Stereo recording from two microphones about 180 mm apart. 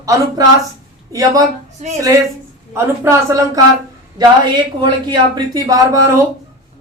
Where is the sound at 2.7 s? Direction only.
15° right (ahead or behind).